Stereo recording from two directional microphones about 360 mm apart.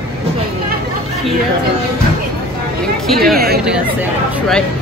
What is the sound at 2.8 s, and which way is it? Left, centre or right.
Speech, centre.